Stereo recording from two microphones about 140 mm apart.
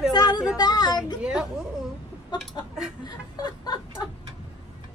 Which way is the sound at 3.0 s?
30° left (ahead or behind).